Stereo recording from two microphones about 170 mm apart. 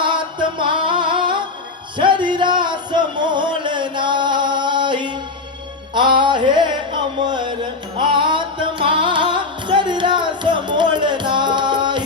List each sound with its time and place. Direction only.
0.0 s music: 30° right (ahead or behind)